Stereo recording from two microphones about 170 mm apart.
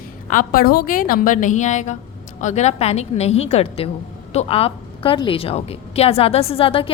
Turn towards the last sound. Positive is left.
turn(degrees=30)  # may be behind; listen again after turning